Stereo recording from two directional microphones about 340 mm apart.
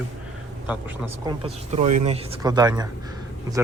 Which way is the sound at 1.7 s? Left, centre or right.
Centre.